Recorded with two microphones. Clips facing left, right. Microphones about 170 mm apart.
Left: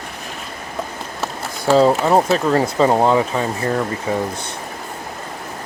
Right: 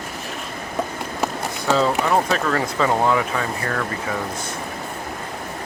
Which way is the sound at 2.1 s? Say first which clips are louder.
Left 5 dB; 30° left (ahead or behind).